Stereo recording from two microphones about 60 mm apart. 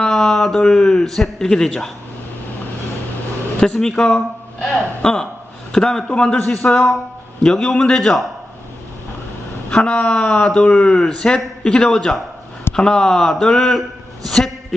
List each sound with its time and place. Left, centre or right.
0.0 s speech: centre
3.6 s speech: centre
9.6 s speech: centre